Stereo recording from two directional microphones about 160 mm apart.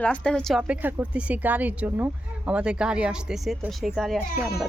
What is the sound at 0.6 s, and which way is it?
Speech, 10° right (ahead or behind).